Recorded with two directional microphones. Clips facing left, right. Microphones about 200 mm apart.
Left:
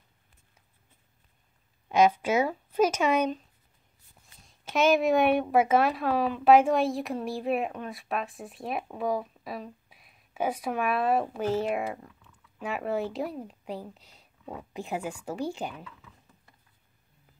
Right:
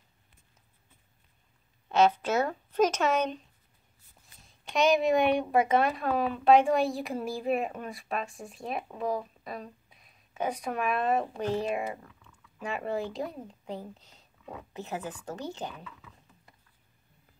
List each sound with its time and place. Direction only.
1.9 s speech: 10° left (ahead or behind)
4.7 s speech: centre (ahead or behind)